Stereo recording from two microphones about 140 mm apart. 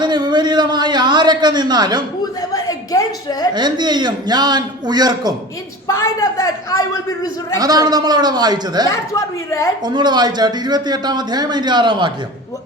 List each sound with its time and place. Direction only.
0.0 s a sound: 30° right (ahead or behind)
2.5 s a sound: 25° left (ahead or behind)
3.5 s a man's voice: 30° right (ahead or behind)
5.9 s a man's voice: 20° left (ahead or behind)
7.6 s a man's voice: 25° right (ahead or behind)
9.1 s a man's voice: 20° left (ahead or behind)
9.8 s a man's voice: 30° right (ahead or behind)